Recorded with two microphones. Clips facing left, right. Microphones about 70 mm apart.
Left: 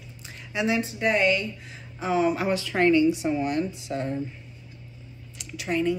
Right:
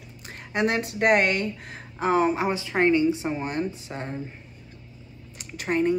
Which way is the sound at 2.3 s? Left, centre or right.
Right.